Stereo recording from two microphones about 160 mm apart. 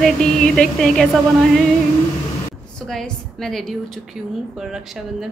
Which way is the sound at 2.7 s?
5° left (ahead or behind).